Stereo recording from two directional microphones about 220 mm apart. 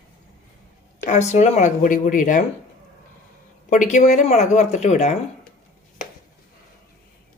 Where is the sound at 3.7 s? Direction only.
35° left (ahead or behind).